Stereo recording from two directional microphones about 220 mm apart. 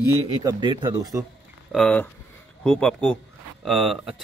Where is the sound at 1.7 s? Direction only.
5° left (ahead or behind).